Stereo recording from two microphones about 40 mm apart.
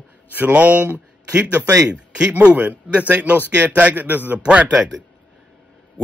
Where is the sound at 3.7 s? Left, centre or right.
Right.